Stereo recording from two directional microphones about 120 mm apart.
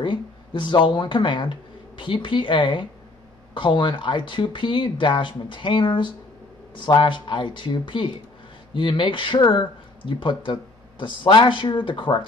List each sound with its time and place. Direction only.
0.0 s speech: 40° left (ahead or behind)